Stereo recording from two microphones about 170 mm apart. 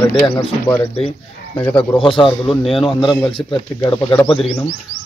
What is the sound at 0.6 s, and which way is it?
Speech, 15° left (ahead or behind).